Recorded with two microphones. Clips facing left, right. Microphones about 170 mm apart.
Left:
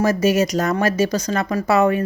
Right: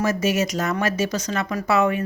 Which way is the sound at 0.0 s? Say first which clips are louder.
Left 5 dB; 35° left (ahead or behind).